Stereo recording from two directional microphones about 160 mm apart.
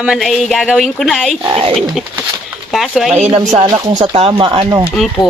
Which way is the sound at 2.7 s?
Centre (ahead or behind).